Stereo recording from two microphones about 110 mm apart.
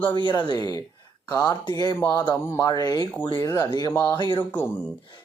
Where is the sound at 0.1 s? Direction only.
40° left (ahead or behind).